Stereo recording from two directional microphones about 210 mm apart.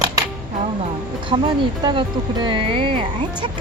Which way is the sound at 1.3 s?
25° right (ahead or behind).